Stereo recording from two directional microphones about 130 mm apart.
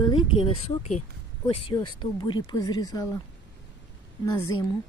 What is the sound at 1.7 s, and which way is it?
Speech, 35° left (ahead or behind).